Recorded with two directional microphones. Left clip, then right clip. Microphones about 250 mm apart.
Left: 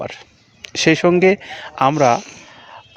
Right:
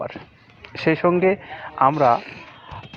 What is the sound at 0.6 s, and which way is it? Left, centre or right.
Speech, left.